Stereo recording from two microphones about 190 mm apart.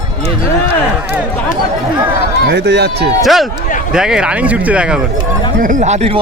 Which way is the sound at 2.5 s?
65° right (ahead or behind).